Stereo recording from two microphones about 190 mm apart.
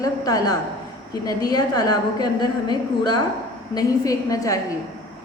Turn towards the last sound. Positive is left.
turn(degrees=20)  # may be behind; listen again after turning